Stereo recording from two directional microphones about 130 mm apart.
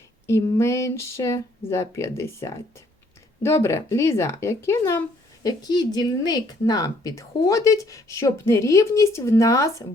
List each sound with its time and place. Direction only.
0.3 s speech: 20° left (ahead or behind)
5.4 s speech: 30° left (ahead or behind)